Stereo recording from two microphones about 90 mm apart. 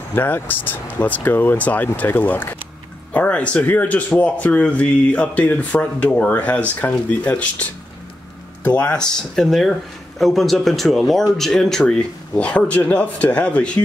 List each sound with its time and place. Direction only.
0.1 s speech: 20° left (ahead or behind)
8.6 s speech: 15° left (ahead or behind)